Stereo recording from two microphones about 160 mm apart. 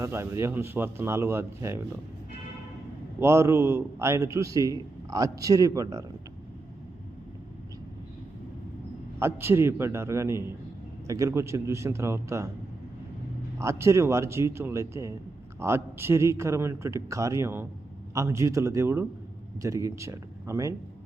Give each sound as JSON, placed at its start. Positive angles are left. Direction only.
{"t": 0.0, "sound": "a man's voice", "side_deg": -15}
{"t": 3.2, "sound": "a man's voice", "side_deg": -15}
{"t": 9.1, "sound": "a man's voice", "side_deg": -15}
{"t": 13.6, "sound": "a man's voice", "side_deg": -15}